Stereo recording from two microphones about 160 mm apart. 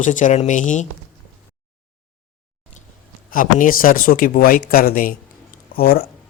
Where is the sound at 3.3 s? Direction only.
60° left (ahead or behind).